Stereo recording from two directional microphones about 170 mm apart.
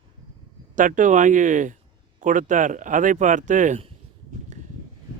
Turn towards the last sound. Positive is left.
turn(degrees=-45)  # may be behind; listen again after turning